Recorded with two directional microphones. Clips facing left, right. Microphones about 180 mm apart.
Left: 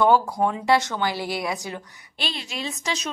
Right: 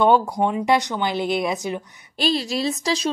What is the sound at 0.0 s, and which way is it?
Speech, 20° right (ahead or behind).